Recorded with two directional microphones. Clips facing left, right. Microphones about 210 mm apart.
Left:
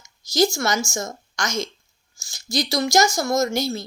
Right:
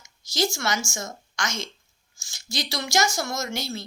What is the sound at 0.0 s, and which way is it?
Speech, 40° left (ahead or behind).